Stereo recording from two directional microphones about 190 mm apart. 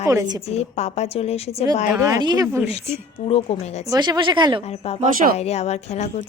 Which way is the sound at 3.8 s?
20° right (ahead or behind).